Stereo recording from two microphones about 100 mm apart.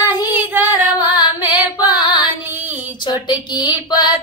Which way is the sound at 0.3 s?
15° right (ahead or behind).